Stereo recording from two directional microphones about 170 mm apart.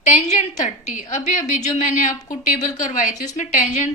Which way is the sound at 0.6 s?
45° left (ahead or behind).